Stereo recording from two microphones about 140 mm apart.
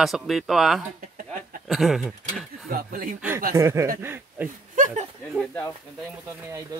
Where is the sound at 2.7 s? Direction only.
85° right.